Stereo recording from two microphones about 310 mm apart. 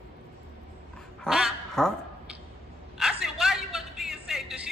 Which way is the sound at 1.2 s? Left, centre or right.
Centre.